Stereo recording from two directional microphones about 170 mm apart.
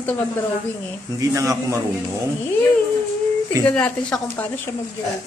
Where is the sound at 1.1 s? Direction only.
20° right (ahead or behind).